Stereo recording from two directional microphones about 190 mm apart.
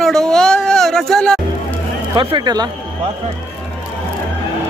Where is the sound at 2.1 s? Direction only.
25° right (ahead or behind).